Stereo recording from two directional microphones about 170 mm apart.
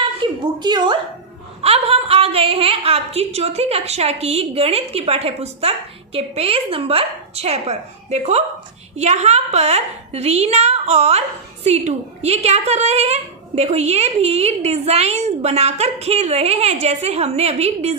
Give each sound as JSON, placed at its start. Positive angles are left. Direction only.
{"t": 0.2, "sound": "a woman's voice", "side_deg": -25}